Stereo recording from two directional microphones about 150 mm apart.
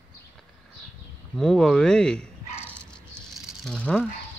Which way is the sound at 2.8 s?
5° left (ahead or behind).